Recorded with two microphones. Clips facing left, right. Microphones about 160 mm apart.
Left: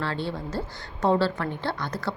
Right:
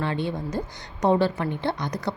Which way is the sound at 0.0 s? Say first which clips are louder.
Right 3 dB; 20° right (ahead or behind).